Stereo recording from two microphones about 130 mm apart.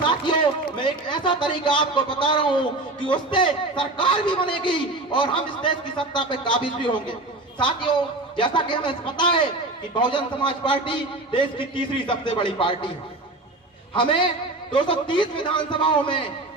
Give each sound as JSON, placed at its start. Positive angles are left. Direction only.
{"t": 0.1, "sound": "a man's voice", "side_deg": 40}
{"t": 13.9, "sound": "a man's voice", "side_deg": 40}